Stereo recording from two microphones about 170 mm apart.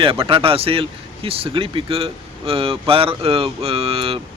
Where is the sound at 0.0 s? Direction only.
30° right (ahead or behind).